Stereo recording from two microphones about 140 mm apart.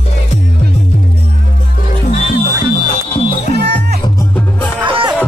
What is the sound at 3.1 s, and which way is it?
Music, 45° left (ahead or behind).